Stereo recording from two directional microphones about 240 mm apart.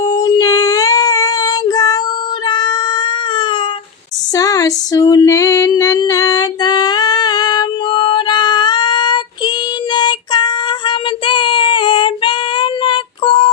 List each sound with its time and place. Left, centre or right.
0.0 s child singing: centre
2.5 s cat: centre
4.4 s female singing: centre
9.9 s child singing: centre